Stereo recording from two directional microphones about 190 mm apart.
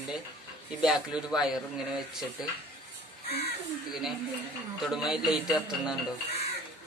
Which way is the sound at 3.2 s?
30° left (ahead or behind).